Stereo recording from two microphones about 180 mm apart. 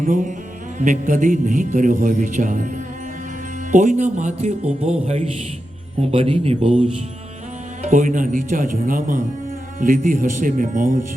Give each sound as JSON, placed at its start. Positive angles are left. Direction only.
{"t": 0.0, "sound": "a man's voice", "side_deg": -45}